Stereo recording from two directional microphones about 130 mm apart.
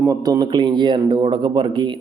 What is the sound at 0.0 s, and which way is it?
A man's voice, 25° right (ahead or behind).